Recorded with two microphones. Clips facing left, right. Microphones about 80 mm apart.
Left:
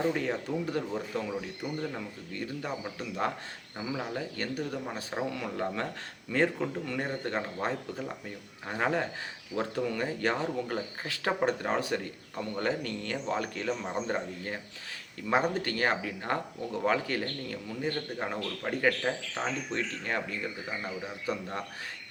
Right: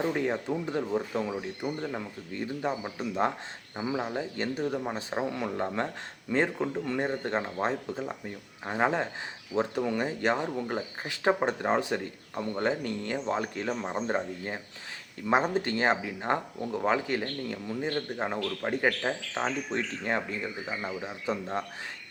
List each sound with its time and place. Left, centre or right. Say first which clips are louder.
0.0 s speech: right 1 dB; centre